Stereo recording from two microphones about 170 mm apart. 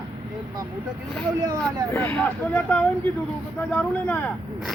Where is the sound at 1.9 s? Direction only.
10° left (ahead or behind).